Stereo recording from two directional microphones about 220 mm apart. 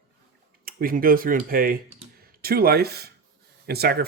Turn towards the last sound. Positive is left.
turn(degrees=-45)  # may be behind; listen again after turning